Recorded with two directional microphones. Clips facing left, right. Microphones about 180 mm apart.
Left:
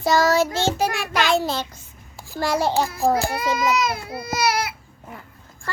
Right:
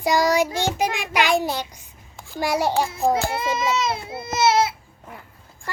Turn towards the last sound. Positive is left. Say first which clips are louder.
# right 4 dB
turn(degrees=-25)  # may be behind; listen again after turning